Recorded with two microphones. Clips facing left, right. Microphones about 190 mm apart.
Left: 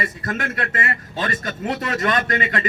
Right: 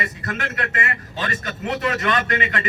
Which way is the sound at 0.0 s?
35° left (ahead or behind).